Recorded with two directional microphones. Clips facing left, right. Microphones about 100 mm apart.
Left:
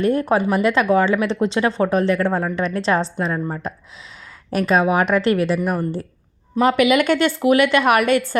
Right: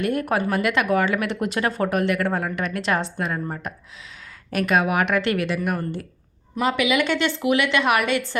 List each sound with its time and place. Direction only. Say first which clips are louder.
0.0 s a woman's voice: left 5 dB; 30° left (ahead or behind)
6.6 s a woman's voice: left 6 dB; 45° left (ahead or behind)